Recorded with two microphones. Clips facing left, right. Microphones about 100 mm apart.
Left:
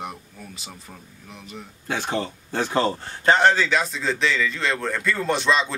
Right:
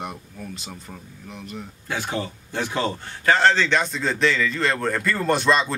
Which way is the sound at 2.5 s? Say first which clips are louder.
Left 3 dB; 40° left (ahead or behind).